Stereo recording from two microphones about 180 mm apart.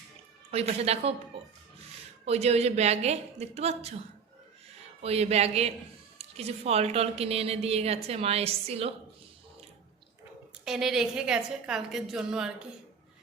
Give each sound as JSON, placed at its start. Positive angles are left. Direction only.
{"t": 0.5, "sound": "a woman's voice", "side_deg": -35}
{"t": 2.2, "sound": "a woman's voice", "side_deg": -35}
{"t": 5.0, "sound": "a woman's voice", "side_deg": -35}
{"t": 10.7, "sound": "a woman's voice", "side_deg": -5}